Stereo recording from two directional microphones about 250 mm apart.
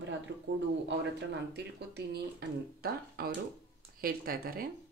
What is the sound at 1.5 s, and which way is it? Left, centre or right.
Speech, right.